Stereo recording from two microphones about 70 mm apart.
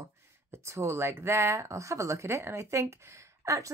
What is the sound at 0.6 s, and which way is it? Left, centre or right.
Speech, right.